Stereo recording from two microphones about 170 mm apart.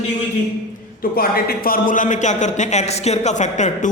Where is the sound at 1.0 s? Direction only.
60° left (ahead or behind).